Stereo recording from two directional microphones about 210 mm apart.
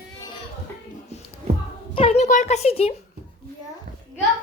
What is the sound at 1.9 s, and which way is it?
A woman's voice, 25° left (ahead or behind).